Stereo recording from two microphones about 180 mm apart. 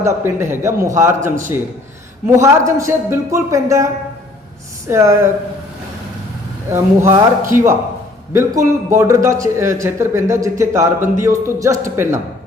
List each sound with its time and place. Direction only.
0.0 s a man's voice: 15° right (ahead or behind)
4.9 s a man's voice: 15° right (ahead or behind)
6.7 s a man's voice: 15° right (ahead or behind)